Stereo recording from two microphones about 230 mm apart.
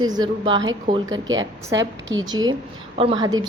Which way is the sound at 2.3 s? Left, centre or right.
Centre.